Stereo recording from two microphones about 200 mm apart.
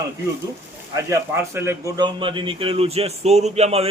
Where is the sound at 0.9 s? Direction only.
15° right (ahead or behind).